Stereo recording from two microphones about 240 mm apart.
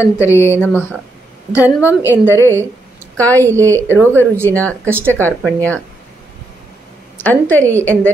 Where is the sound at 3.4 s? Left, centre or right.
Centre.